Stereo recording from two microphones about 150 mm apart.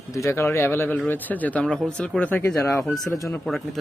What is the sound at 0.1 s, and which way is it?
Speech, 20° left (ahead or behind).